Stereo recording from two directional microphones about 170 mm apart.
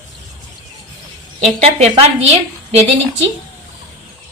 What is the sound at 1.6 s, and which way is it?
Speech, 40° right (ahead or behind).